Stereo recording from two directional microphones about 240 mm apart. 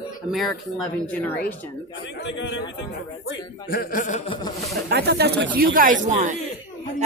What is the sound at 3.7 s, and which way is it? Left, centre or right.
Speech, left.